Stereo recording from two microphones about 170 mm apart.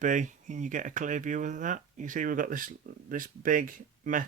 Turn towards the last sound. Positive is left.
turn(degrees=-50)  # may be behind; listen again after turning